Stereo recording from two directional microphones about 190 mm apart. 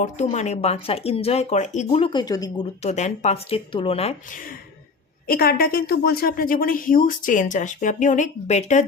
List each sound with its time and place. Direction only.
0.0 s speech: 40° left (ahead or behind); by 2.5 s 20° left (ahead or behind)
2.8 s speech: 35° left (ahead or behind)
5.3 s a woman's voice: 50° left (ahead or behind); by 8.8 s 35° left (ahead or behind)